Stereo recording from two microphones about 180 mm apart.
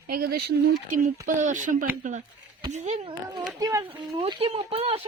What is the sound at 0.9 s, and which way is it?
Speech, 45° right (ahead or behind).